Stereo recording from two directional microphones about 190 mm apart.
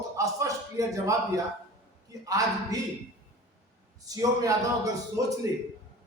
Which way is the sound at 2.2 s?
20° right (ahead or behind).